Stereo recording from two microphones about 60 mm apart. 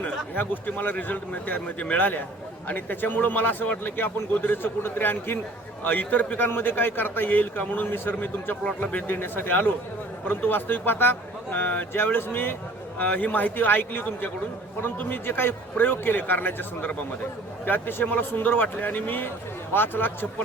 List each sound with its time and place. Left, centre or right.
0.0 s a man's voice: left
8.6 s a man's voice: left
13.0 s a man's voice: left